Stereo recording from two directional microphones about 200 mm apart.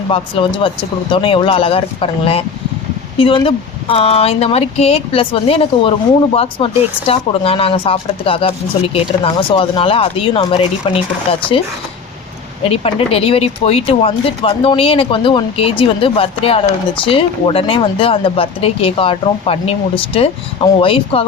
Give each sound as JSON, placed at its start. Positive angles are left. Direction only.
{"t": 0.1, "sound": "speech", "side_deg": 25}
{"t": 12.6, "sound": "speech", "side_deg": 30}